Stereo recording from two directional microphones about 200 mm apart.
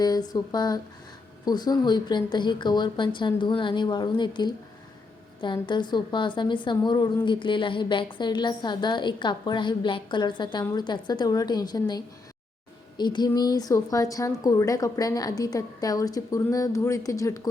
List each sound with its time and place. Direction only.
0.0 s a woman's voice: 20° left (ahead or behind)